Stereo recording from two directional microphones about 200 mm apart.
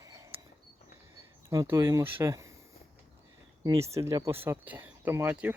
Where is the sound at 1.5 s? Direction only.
15° right (ahead or behind).